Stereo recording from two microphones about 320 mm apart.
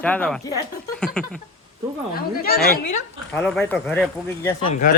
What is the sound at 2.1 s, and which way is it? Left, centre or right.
Speech, left.